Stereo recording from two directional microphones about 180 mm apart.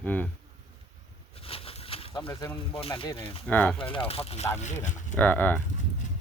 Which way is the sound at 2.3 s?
15° left (ahead or behind).